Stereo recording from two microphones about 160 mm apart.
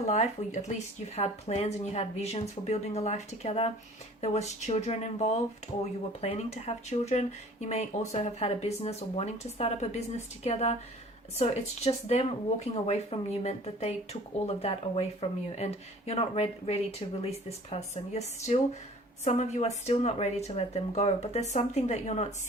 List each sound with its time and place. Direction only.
0.1 s speech: 45° left (ahead or behind)